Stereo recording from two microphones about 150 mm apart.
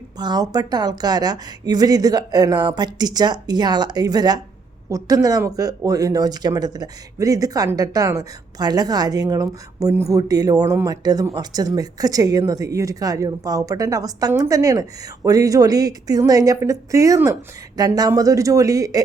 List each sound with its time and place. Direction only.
0.2 s speech: 25° right (ahead or behind)